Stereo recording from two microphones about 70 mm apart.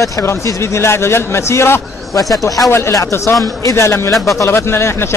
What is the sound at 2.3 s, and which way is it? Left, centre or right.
A man's voice, left.